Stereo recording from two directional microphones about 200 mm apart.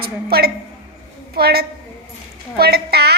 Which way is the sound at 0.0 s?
50° right (ahead or behind).